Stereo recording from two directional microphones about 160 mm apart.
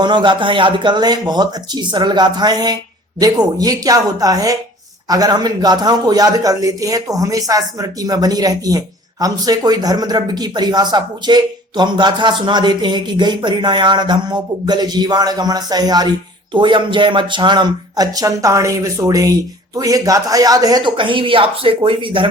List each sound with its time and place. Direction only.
0.0 s speech: 30° right (ahead or behind)